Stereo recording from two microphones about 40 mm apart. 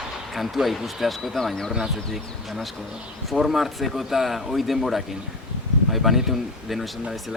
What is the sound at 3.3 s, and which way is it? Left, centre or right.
Speech, centre.